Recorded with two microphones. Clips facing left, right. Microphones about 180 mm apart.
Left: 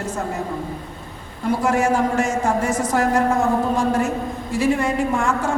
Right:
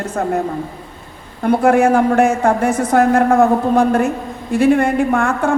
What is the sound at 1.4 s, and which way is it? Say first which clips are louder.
A man's voice: right 7 dB; 60° right (ahead or behind).